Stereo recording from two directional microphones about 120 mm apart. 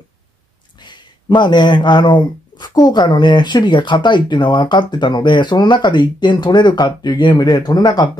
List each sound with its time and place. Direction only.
0.7 s speech: 40° left (ahead or behind)